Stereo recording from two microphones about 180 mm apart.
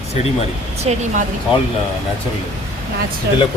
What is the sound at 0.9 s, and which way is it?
Speech, 40° right (ahead or behind).